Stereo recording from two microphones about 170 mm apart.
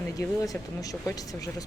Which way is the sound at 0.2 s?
20° left (ahead or behind).